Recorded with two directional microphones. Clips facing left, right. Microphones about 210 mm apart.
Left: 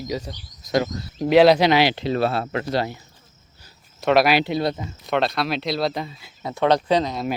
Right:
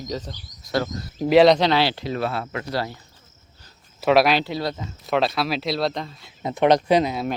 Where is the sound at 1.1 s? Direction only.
Centre (ahead or behind); by 2.0 s 15° left (ahead or behind).